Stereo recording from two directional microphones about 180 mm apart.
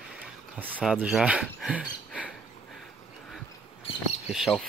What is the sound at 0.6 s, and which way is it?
Speech, 10° right (ahead or behind).